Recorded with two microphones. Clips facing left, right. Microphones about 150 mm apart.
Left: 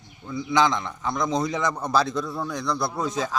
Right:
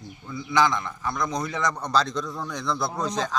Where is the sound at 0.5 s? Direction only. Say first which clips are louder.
Left 1 dB; 20° left (ahead or behind).